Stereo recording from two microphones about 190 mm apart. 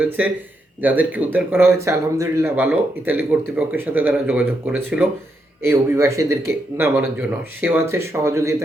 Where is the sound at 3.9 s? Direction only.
10° right (ahead or behind).